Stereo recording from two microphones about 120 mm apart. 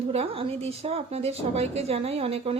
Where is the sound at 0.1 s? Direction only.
60° right (ahead or behind).